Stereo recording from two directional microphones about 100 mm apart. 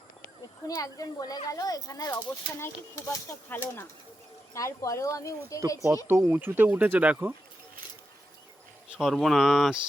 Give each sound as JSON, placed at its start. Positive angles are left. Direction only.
{"t": 0.7, "sound": "a child's voice", "side_deg": 35}
{"t": 2.6, "sound": "speech", "side_deg": 25}
{"t": 4.5, "sound": "a child's voice", "side_deg": 30}
{"t": 6.3, "sound": "speech", "side_deg": -20}
{"t": 9.0, "sound": "speech", "side_deg": 0}